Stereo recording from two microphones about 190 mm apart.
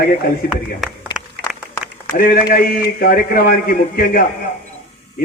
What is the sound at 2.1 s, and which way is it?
A man's voice, 50° left (ahead or behind).